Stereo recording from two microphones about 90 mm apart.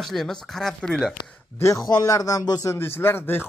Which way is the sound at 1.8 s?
45° left (ahead or behind).